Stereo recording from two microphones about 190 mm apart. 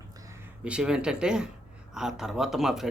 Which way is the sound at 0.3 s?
5° right (ahead or behind).